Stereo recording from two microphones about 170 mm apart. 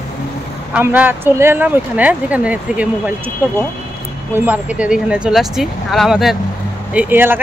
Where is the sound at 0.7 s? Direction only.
10° right (ahead or behind).